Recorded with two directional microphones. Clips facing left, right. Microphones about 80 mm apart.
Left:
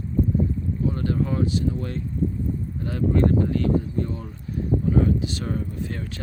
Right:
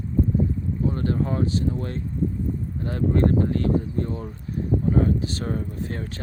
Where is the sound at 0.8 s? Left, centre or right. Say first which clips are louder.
Even; right.